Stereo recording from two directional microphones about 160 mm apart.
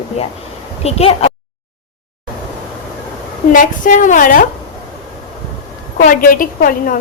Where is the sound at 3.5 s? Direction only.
55° left (ahead or behind).